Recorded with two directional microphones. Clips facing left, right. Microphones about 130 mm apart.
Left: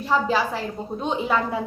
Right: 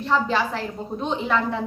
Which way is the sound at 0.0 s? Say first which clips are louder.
Even; 5° left (ahead or behind).